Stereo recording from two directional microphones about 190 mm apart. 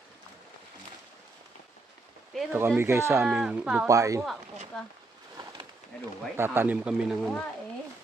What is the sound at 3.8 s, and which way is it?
Speech, 15° right (ahead or behind).